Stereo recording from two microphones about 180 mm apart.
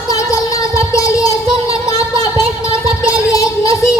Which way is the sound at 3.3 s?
20° left (ahead or behind).